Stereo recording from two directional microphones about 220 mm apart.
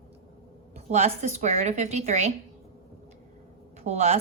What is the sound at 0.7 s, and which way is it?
A woman's voice, 30° right (ahead or behind).